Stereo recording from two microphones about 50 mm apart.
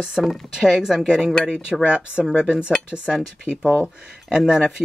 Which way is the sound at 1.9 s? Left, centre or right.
Right.